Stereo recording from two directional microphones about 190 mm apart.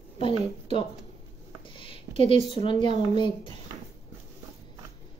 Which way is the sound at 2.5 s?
25° left (ahead or behind).